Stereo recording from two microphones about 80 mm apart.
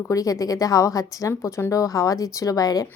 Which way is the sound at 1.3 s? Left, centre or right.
Left.